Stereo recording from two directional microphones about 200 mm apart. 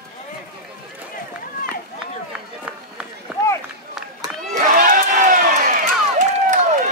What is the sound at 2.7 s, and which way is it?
Run, 5° right (ahead or behind).